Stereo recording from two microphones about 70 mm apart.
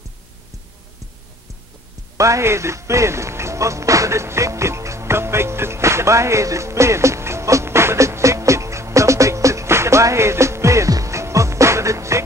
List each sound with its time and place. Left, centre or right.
2.1 s music: right